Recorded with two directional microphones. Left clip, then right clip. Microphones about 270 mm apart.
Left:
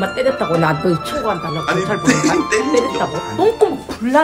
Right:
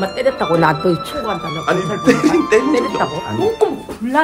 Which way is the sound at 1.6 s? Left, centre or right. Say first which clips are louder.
Right 3 dB; centre.